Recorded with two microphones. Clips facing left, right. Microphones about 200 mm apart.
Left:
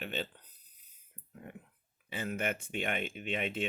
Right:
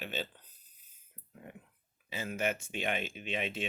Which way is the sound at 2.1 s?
55° left (ahead or behind).